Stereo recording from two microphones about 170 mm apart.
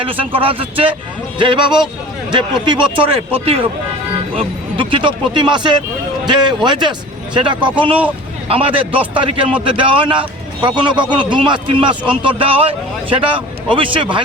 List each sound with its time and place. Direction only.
0.0 s a man's voice: 30° right (ahead or behind)